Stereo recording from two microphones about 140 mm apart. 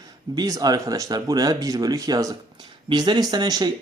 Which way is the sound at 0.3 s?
25° right (ahead or behind).